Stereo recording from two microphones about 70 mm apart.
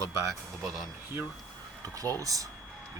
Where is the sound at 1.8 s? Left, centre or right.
Right.